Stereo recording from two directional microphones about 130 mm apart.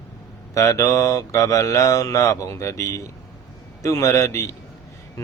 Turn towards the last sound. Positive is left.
turn(degrees=25)  # may be behind; listen again after turning